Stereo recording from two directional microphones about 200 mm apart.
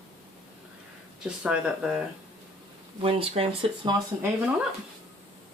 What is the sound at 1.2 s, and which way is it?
Speech, 5° right (ahead or behind).